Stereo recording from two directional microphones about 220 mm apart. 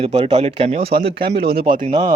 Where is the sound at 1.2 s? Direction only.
45° right (ahead or behind).